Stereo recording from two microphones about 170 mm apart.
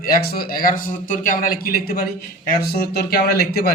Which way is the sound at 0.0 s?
60° left (ahead or behind).